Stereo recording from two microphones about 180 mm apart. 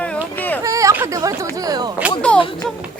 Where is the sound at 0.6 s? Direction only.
20° right (ahead or behind).